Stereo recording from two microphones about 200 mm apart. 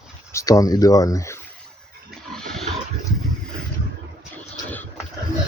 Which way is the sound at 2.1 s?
Centre (ahead or behind).